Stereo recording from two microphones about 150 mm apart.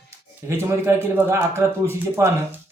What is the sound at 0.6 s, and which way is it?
A man's voice, 15° right (ahead or behind).